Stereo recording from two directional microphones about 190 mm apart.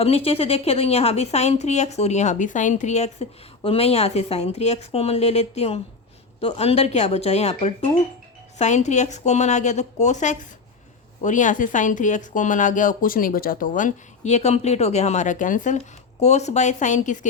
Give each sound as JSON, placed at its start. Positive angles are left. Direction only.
{"t": 0.0, "sound": "a woman's voice", "side_deg": 30}
{"t": 8.5, "sound": "a woman's voice", "side_deg": 40}